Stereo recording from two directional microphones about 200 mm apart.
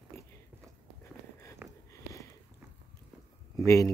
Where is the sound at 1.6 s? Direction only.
10° right (ahead or behind).